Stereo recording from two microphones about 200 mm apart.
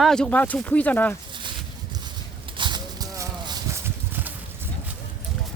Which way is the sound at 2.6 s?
20° right (ahead or behind).